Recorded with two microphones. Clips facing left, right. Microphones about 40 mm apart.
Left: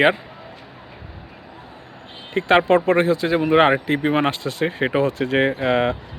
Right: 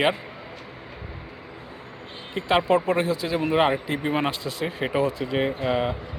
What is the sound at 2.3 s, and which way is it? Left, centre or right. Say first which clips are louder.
Speech: left 5 dB; left.